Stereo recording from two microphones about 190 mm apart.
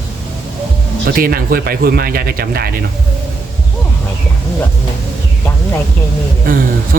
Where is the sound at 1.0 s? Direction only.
55° right (ahead or behind).